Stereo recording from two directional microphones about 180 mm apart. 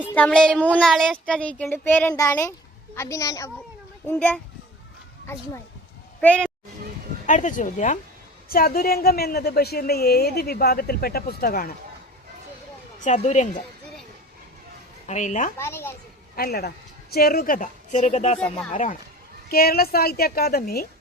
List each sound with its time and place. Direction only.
0.1 s speech: 5° left (ahead or behind)
6.1 s speech: 5° left (ahead or behind)
7.3 s speech: 45° left (ahead or behind)
8.4 s a woman's voice: 55° left (ahead or behind)
13.0 s speech: 40° left (ahead or behind)
15.0 s speech: 40° left (ahead or behind)
15.5 s speech: 15° left (ahead or behind)
16.3 s a woman's voice: 55° left (ahead or behind)
19.5 s a woman's voice: 55° left (ahead or behind)